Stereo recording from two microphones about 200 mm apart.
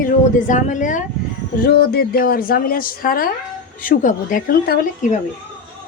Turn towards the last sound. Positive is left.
turn(degrees=45)  # may be behind; listen again after turning